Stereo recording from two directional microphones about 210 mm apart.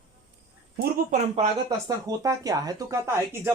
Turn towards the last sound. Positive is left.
turn(degrees=-10)  # may be behind; listen again after turning